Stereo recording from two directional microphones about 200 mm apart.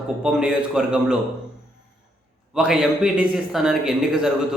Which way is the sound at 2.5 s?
5° right (ahead or behind).